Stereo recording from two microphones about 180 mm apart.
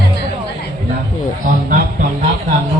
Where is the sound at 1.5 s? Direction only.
50° right (ahead or behind).